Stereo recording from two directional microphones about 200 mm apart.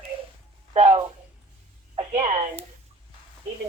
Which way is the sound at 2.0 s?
30° right (ahead or behind).